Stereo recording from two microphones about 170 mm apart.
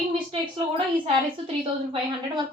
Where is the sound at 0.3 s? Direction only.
30° right (ahead or behind).